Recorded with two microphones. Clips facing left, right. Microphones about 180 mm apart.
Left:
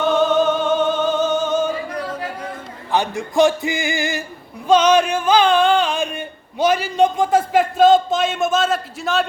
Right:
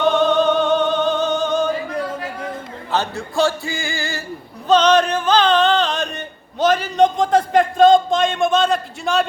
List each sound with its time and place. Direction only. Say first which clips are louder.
0.2 s music: right 1 dB; 5° left (ahead or behind)
2.9 s speech: left 2 dB; 15° left (ahead or behind)
4.7 s a sound: even; 10° left (ahead or behind)